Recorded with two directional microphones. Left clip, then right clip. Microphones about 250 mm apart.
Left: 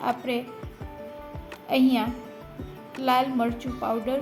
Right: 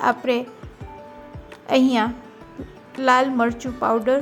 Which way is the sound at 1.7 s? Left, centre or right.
Right.